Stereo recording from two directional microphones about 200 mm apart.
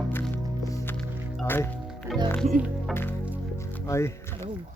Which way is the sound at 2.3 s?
Centre (ahead or behind).